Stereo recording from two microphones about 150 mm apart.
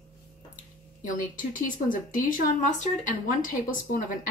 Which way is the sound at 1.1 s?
65° left (ahead or behind).